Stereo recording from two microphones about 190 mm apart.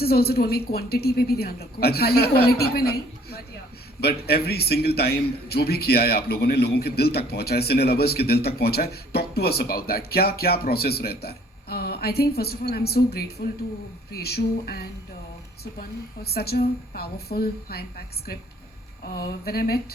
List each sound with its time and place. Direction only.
0.0 s a man's voice: 55° left (ahead or behind)
16.2 s a man's voice: 55° left (ahead or behind)